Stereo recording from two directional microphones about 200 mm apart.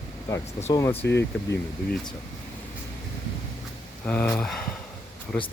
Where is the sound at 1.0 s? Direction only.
60° left (ahead or behind).